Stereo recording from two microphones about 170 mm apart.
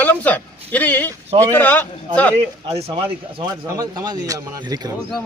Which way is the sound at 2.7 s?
35° right (ahead or behind).